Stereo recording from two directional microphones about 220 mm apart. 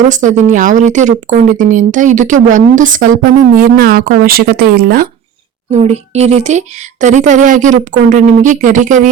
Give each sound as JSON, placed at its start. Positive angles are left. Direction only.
{"t": 0.1, "sound": "a woman's voice", "side_deg": -35}
{"t": 5.7, "sound": "a woman's voice", "side_deg": -30}